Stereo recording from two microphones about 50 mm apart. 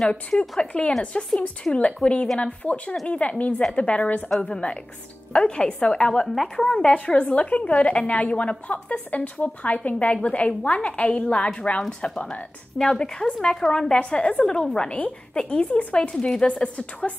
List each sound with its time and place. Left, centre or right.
0.4 s a woman's voice: left
6.2 s a woman's voice: centre
6.9 s a woman's voice: left
12.7 s a woman's voice: centre
16.6 s a woman's voice: left